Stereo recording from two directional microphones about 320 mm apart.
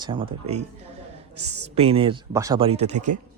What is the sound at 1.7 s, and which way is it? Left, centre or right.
Speech, centre.